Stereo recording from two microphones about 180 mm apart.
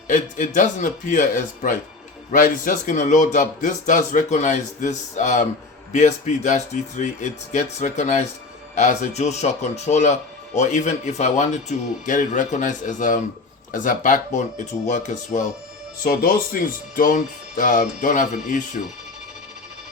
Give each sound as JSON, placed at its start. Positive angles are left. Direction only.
{"t": 0.1, "sound": "speech", "side_deg": 45}